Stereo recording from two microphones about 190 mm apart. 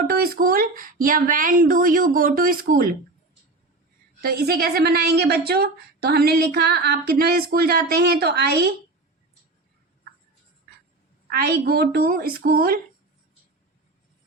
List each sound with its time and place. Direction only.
0.1 s speech: 50° right (ahead or behind)
4.2 s a woman's voice: 55° right (ahead or behind)
11.3 s speech: 50° right (ahead or behind)